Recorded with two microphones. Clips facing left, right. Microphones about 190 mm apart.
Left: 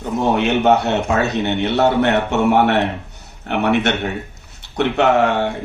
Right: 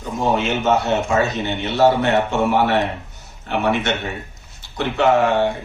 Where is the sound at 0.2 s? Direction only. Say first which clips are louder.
Left 3 dB; 65° left (ahead or behind).